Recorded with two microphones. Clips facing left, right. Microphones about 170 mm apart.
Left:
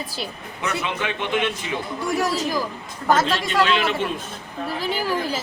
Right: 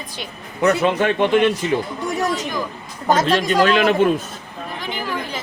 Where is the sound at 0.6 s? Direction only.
45° right (ahead or behind).